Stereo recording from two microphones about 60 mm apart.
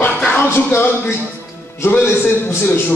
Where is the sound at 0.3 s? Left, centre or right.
Left.